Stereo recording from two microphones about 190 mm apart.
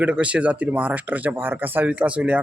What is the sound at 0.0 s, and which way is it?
Speech, 5° right (ahead or behind).